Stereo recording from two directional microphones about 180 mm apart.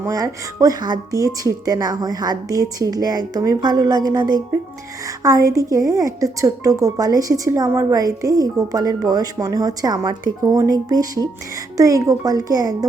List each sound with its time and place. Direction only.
0.0 s a woman's voice: 20° right (ahead or behind)